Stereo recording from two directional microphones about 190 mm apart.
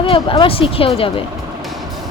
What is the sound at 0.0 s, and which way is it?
Speech, 25° left (ahead or behind).